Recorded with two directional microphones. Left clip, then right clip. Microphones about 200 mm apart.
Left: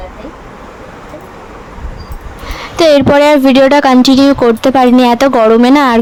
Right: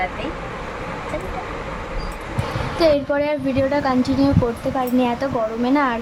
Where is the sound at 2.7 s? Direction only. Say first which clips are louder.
Left 11 dB; 45° left (ahead or behind).